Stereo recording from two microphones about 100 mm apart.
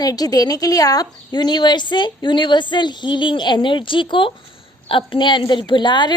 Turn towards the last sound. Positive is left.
turn(degrees=50)  # may be behind; listen again after turning